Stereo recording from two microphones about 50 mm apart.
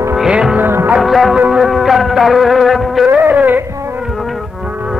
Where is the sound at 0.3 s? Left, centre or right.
Centre.